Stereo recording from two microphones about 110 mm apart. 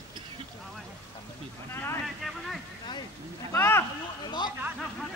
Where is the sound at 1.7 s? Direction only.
25° left (ahead or behind).